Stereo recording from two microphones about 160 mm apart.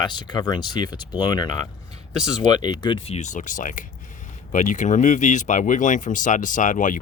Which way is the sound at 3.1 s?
50° left (ahead or behind).